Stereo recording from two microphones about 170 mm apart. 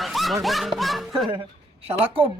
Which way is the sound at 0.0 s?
Centre (ahead or behind).